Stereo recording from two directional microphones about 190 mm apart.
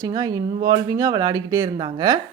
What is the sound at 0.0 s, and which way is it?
A woman's voice, 20° right (ahead or behind).